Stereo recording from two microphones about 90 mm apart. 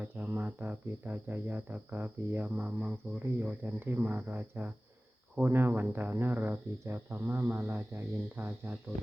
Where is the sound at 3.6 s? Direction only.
20° right (ahead or behind).